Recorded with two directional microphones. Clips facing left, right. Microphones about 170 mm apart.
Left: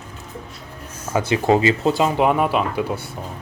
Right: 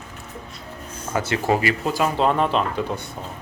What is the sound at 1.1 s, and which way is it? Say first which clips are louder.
Speech: left 4 dB; 15° left (ahead or behind).